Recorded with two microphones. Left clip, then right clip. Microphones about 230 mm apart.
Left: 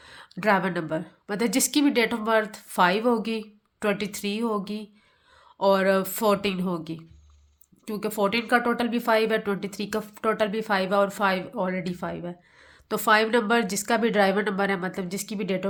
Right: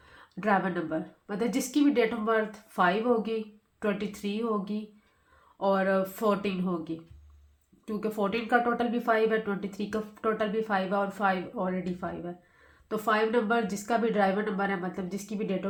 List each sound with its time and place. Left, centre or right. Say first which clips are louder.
0.0 s a woman's voice: left 6 dB; left